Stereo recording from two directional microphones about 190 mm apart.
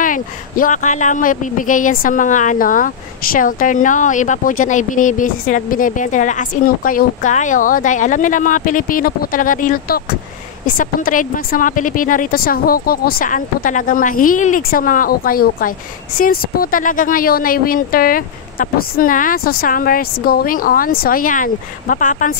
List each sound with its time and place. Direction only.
0.0 s a woman's voice: 45° left (ahead or behind)